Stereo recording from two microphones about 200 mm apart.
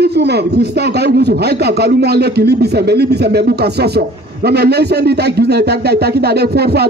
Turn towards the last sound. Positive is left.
turn(degrees=-55)  # may be behind; listen again after turning